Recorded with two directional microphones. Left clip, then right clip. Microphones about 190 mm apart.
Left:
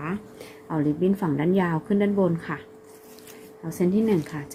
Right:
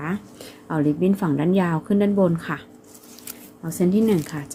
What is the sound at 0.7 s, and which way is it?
Speech, 15° right (ahead or behind).